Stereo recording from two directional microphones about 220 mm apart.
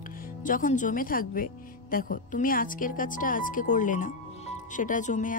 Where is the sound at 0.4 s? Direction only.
35° left (ahead or behind).